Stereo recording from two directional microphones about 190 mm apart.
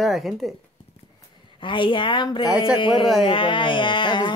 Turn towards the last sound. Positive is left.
turn(degrees=25)  # may be behind; listen again after turning